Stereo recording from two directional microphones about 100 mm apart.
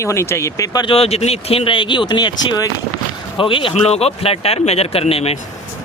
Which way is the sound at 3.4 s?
60° left (ahead or behind).